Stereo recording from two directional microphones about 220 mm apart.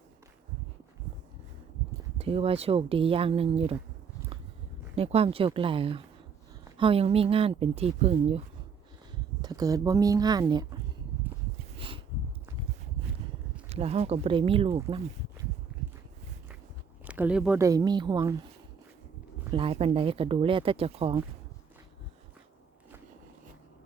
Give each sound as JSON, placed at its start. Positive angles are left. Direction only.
{"t": 2.1, "sound": "speech", "side_deg": -25}
{"t": 4.3, "sound": "a sound", "side_deg": -25}
{"t": 4.9, "sound": "speech", "side_deg": -25}
{"t": 9.4, "sound": "speech", "side_deg": -15}
{"t": 11.8, "sound": "a sound", "side_deg": -25}
{"t": 13.7, "sound": "speech", "side_deg": -30}
{"t": 14.8, "sound": "a sound", "side_deg": -25}
{"t": 17.1, "sound": "speech", "side_deg": -5}
{"t": 19.5, "sound": "speech", "side_deg": -25}